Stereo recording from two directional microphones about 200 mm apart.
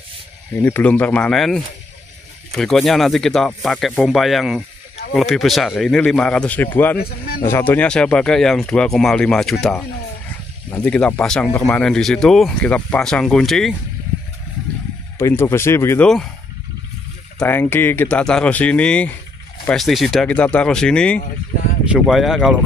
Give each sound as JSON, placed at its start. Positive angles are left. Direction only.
{"t": 0.6, "sound": "speech", "side_deg": 10}
{"t": 7.0, "sound": "speech", "side_deg": 50}
{"t": 7.4, "sound": "speech", "side_deg": 10}
{"t": 15.1, "sound": "speech", "side_deg": 10}
{"t": 17.4, "sound": "speech", "side_deg": 10}